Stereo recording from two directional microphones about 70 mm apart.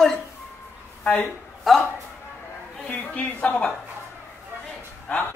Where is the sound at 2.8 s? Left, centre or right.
Left.